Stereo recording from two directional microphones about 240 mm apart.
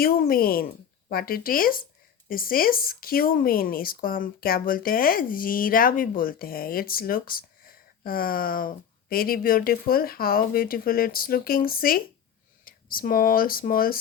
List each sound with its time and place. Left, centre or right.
0.0 s speech: left